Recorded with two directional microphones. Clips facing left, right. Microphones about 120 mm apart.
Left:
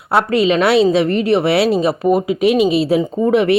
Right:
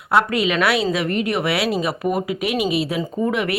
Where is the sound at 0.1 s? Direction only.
30° left (ahead or behind).